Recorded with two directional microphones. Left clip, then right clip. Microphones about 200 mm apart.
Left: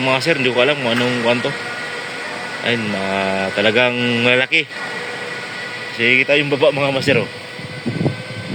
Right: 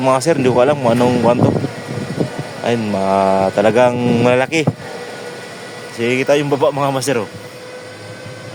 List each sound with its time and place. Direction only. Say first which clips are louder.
0.0 s speech: right 2 dB; 20° right (ahead or behind)
2.6 s speech: right 4 dB; 15° right (ahead or behind)
6.0 s speech: left 1 dB; 20° right (ahead or behind)